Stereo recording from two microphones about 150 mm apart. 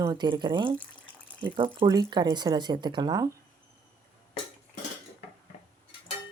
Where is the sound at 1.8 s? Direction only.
25° right (ahead or behind).